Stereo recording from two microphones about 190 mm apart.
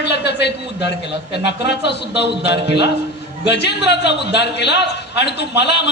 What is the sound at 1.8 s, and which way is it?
A man's voice, 65° left (ahead or behind).